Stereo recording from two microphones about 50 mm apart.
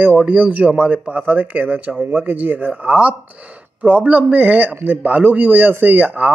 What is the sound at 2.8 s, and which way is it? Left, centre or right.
Speech, right.